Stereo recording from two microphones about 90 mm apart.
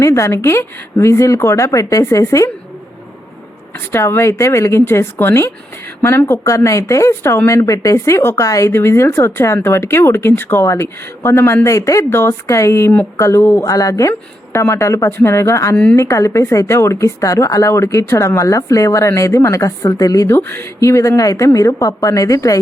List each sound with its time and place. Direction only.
0.0 s speech: 35° left (ahead or behind)
3.9 s speech: 30° left (ahead or behind)
13.7 s speech: 40° left (ahead or behind)
14.1 s speech: 25° left (ahead or behind)
15.7 s a woman's voice: 10° left (ahead or behind)
16.0 s speech: 35° left (ahead or behind)
20.2 s speech: 25° left (ahead or behind)